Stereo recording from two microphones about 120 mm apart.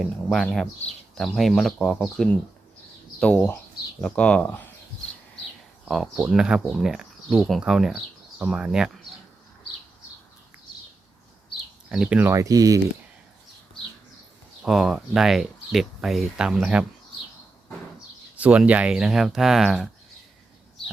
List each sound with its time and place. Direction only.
0.0 s speech: 5° left (ahead or behind)
5.8 s speech: centre (ahead or behind)
11.9 s speech: 5° right (ahead or behind)
12.3 s speech: 30° right (ahead or behind)
14.6 s speech: 5° right (ahead or behind)
18.3 s speech: 10° right (ahead or behind)